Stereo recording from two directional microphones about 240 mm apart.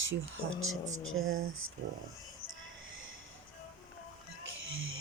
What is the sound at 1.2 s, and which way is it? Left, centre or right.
Speech, right.